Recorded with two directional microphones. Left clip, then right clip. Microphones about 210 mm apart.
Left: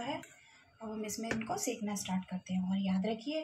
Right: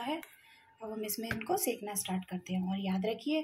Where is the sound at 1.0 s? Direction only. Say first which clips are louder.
Right 1 dB; 50° right (ahead or behind).